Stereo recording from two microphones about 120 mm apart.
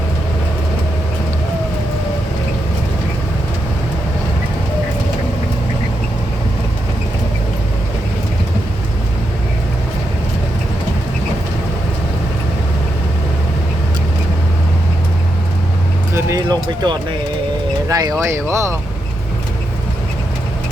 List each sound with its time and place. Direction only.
16.1 s speech: 30° right (ahead or behind)
17.8 s a sound: 30° right (ahead or behind)
18.2 s speech: 20° right (ahead or behind)